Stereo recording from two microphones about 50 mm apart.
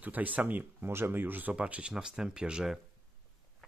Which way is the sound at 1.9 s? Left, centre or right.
Centre.